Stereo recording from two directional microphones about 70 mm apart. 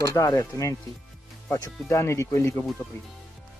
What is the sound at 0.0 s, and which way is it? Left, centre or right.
Speech, left.